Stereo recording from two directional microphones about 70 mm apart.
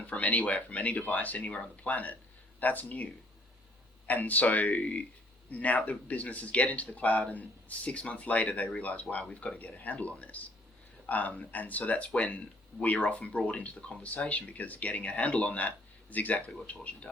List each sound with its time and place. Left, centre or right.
0.0 s speech: left